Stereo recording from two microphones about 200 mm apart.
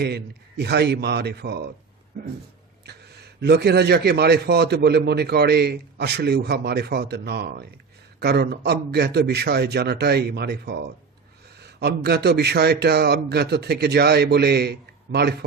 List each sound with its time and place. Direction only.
0.0 s a man's voice: 55° right (ahead or behind)
3.4 s a man's voice: 55° right (ahead or behind)